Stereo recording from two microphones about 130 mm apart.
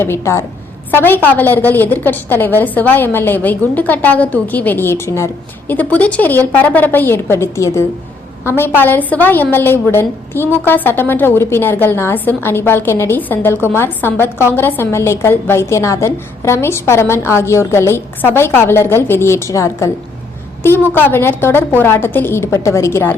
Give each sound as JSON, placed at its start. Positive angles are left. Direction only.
{"t": 0.0, "sound": "a woman's voice", "side_deg": 20}